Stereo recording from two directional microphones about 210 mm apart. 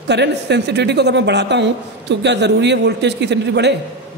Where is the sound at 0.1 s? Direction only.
55° right (ahead or behind).